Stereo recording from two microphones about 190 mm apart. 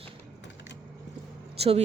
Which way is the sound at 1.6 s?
30° right (ahead or behind).